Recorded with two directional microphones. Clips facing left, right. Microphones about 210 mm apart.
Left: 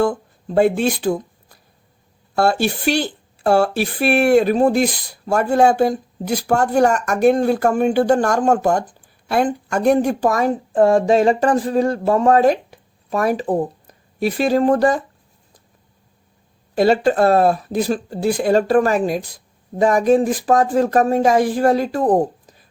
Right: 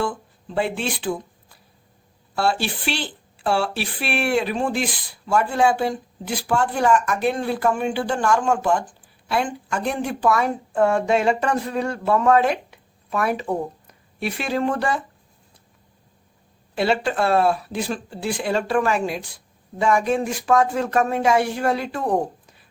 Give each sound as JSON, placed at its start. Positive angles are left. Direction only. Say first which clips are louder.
{"t": 0.0, "sound": "speech", "louder": "left 7 dB", "side_deg": 45}
{"t": 16.7, "sound": "speech", "louder": "left 7 dB", "side_deg": 40}